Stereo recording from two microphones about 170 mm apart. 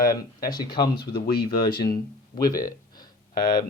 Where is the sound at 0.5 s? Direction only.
25° left (ahead or behind).